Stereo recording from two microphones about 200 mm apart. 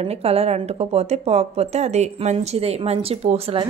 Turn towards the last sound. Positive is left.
turn(degrees=-30)  # may be behind; listen again after turning